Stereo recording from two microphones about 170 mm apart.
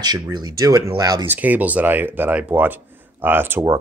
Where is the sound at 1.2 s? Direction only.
10° right (ahead or behind).